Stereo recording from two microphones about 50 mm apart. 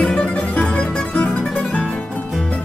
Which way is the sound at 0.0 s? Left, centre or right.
Left.